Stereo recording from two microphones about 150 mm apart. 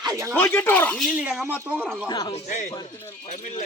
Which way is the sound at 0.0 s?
20° right (ahead or behind).